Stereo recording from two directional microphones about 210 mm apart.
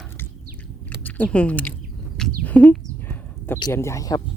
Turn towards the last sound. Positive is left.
turn(degrees=15)  # may be behind; listen again after turning